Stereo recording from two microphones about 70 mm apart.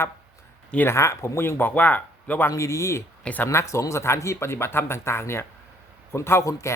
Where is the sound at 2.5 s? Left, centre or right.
Left.